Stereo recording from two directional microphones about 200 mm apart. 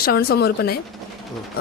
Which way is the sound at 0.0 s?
50° left (ahead or behind).